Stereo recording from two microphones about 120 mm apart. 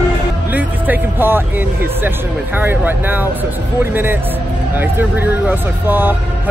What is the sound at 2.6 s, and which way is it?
Speech, 15° right (ahead or behind).